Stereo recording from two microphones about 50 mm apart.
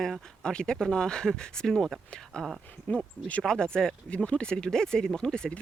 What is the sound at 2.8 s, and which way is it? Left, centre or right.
Speech, left.